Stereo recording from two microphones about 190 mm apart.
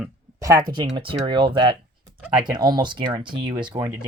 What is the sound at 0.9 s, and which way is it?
Speech, 25° right (ahead or behind).